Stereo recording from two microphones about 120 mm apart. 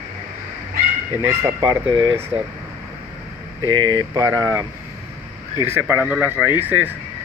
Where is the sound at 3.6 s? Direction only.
35° right (ahead or behind).